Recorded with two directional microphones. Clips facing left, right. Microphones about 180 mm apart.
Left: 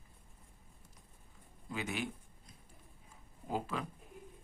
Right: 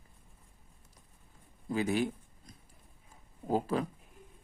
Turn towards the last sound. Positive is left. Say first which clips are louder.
# right 8 dB
turn(degrees=-40)  # may be behind; listen again after turning